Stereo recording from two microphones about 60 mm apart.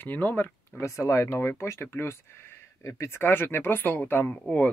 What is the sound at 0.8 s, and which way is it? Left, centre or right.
Speech, left.